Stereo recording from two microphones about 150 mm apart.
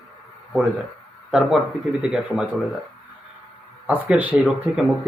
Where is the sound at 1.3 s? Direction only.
5° right (ahead or behind).